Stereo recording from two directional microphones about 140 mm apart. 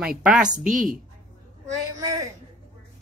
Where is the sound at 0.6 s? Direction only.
75° right (ahead or behind).